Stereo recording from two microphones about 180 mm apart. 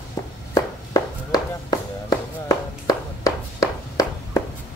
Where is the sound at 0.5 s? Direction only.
20° left (ahead or behind).